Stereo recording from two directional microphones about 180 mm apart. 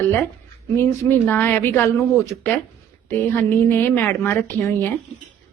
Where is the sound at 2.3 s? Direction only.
Centre (ahead or behind).